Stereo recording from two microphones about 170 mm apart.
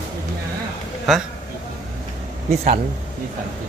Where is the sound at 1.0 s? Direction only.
Centre (ahead or behind).